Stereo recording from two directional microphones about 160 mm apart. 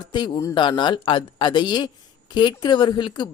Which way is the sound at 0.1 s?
25° left (ahead or behind).